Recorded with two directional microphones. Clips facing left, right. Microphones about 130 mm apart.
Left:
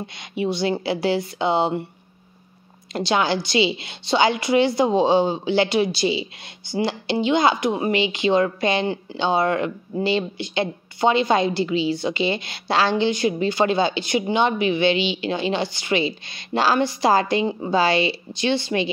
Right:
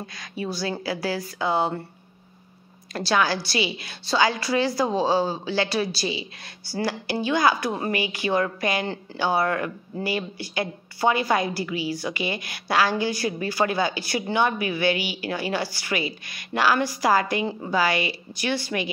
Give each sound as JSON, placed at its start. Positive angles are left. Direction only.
{"t": 0.0, "sound": "a woman's voice", "side_deg": 25}
{"t": 2.9, "sound": "a woman's voice", "side_deg": 20}